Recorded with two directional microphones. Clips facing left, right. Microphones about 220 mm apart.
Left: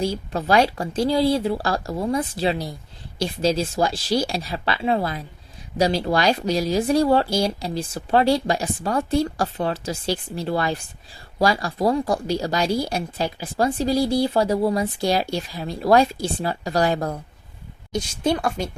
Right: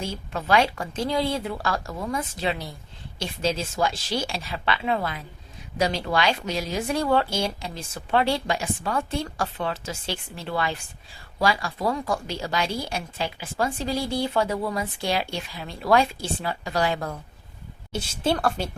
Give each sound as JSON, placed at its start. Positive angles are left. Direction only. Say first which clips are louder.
{"t": 0.0, "sound": "speech", "louder": "left 7 dB", "side_deg": 35}
{"t": 18.2, "sound": "a woman's voice", "louder": "left 1 dB", "side_deg": 10}